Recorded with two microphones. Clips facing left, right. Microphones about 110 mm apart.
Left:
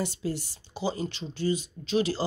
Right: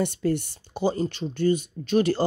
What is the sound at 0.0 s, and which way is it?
Speech, 55° right (ahead or behind).